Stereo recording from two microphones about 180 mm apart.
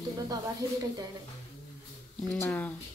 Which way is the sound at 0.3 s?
20° right (ahead or behind).